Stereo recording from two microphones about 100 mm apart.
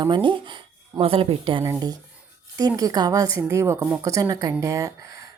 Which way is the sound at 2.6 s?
40° right (ahead or behind).